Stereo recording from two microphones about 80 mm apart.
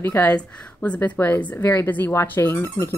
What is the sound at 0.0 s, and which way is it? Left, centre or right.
A woman's voice, left.